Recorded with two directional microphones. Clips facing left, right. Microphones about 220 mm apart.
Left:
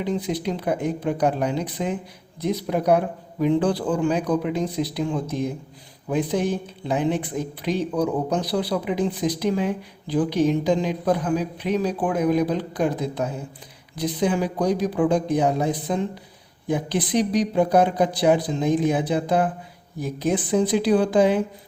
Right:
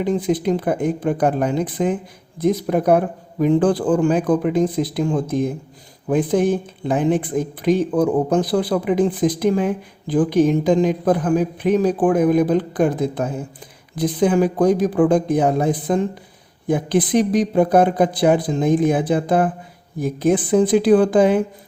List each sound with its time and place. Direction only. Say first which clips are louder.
0.0 s speech: right 6 dB; 50° right (ahead or behind)